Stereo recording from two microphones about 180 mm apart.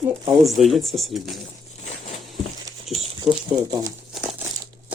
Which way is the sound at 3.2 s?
20° right (ahead or behind).